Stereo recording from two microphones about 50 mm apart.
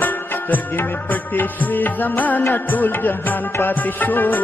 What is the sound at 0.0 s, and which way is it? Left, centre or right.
Music, left.